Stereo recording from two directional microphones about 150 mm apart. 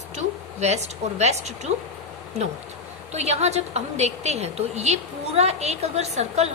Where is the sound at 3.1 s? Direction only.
45° right (ahead or behind).